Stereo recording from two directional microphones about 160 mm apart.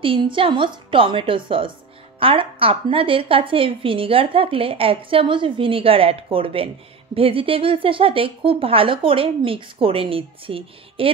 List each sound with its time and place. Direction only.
0.0 s a woman's voice: 30° right (ahead or behind)